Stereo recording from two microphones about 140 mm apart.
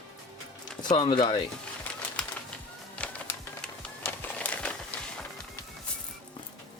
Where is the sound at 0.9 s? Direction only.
35° left (ahead or behind).